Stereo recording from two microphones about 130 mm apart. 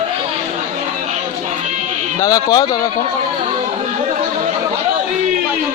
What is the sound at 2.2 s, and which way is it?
Speech, 25° left (ahead or behind).